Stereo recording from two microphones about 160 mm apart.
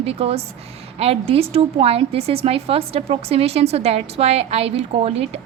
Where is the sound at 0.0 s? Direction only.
40° right (ahead or behind).